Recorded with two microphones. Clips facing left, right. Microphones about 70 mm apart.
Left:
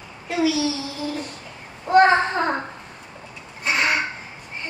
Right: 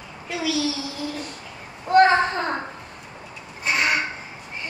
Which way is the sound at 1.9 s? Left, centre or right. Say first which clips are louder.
Left 1 dB; centre.